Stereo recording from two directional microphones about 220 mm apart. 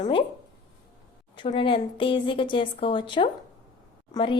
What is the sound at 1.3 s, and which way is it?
A woman's voice, 25° left (ahead or behind).